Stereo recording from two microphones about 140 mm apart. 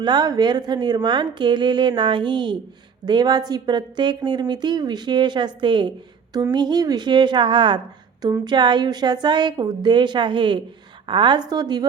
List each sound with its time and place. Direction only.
0.0 s a woman's voice: 30° right (ahead or behind)